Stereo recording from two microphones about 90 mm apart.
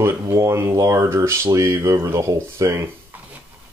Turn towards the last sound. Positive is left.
turn(degrees=-35)  # may be behind; listen again after turning